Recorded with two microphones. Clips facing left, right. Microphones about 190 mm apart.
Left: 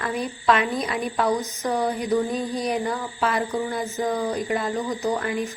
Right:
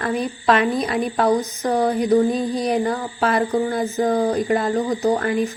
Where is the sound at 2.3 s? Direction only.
30° right (ahead or behind).